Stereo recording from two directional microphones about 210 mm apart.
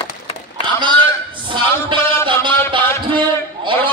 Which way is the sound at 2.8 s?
10° left (ahead or behind).